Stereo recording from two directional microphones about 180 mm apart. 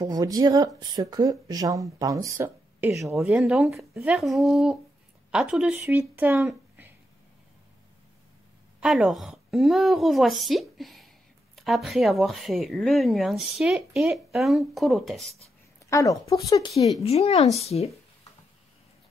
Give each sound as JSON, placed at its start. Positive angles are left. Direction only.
{"t": 0.0, "sound": "speech", "side_deg": -20}
{"t": 3.2, "sound": "speech", "side_deg": -5}
{"t": 8.8, "sound": "speech", "side_deg": 0}
{"t": 15.9, "sound": "speech", "side_deg": 20}
{"t": 17.0, "sound": "speech", "side_deg": 35}